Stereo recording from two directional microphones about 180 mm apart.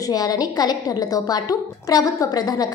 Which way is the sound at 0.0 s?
20° left (ahead or behind).